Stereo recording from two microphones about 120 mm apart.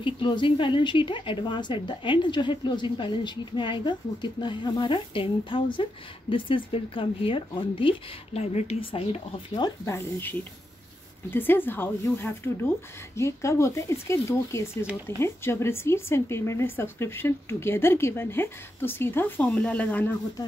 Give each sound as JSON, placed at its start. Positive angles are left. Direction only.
{"t": 0.0, "sound": "speech", "side_deg": 45}
{"t": 9.8, "sound": "speech", "side_deg": 20}